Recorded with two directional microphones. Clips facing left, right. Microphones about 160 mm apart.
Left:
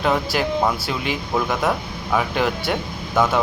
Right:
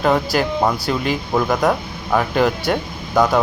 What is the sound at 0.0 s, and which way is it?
Speech, centre (ahead or behind).